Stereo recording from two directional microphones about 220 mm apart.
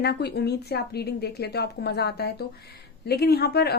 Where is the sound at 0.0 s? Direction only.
50° left (ahead or behind).